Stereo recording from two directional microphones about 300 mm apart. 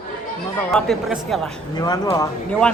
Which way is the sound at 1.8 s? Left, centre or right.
Centre.